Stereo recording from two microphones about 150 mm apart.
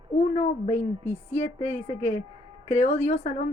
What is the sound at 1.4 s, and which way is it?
Speech, 45° left (ahead or behind).